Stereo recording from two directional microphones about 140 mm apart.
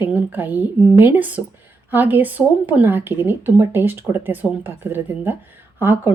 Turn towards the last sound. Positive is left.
turn(degrees=-15)  # may be behind; listen again after turning